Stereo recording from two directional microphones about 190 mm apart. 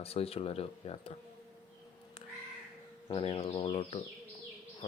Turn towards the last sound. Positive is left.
turn(degrees=30)  # may be behind; listen again after turning